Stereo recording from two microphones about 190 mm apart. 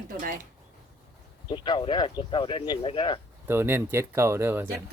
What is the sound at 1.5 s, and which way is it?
Speech, 25° left (ahead or behind).